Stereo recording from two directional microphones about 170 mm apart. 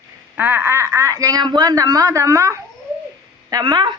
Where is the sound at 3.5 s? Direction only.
25° right (ahead or behind).